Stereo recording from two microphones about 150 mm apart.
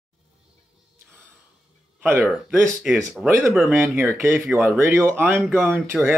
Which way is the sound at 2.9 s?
5° right (ahead or behind).